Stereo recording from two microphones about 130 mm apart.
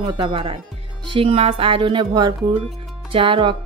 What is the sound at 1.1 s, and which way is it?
Music, 50° right (ahead or behind).